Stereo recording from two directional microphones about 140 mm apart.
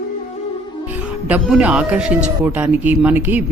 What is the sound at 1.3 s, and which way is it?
Speech, 5° right (ahead or behind).